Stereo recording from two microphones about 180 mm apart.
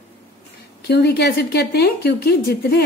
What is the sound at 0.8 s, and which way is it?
Speech, 65° left (ahead or behind).